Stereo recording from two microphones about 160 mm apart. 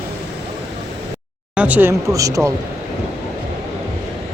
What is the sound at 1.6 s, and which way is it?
Speech, 10° right (ahead or behind).